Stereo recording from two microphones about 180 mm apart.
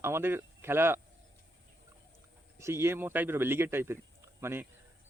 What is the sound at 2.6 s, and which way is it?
Speech, 15° right (ahead or behind).